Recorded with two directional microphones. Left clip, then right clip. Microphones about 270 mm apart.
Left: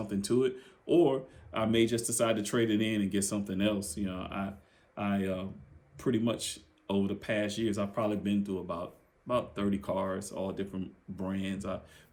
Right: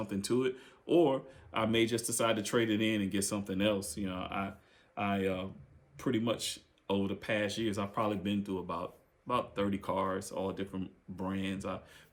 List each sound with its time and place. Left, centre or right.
0.1 s speech: centre